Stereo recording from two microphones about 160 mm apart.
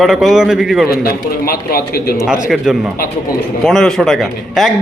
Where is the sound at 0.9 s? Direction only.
70° left (ahead or behind).